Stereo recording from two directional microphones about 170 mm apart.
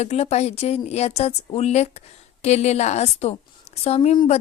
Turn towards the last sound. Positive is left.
turn(degrees=40)  # may be behind; listen again after turning